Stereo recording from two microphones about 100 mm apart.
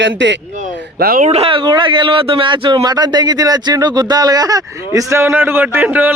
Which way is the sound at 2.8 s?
45° right (ahead or behind).